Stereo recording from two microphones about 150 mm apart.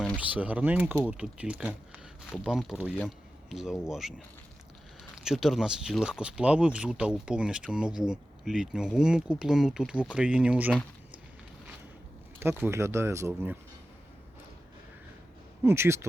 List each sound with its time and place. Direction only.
0.3 s speech: 10° right (ahead or behind)
5.1 s speech: 5° right (ahead or behind)
12.4 s speech: 15° right (ahead or behind)
15.6 s speech: 15° right (ahead or behind)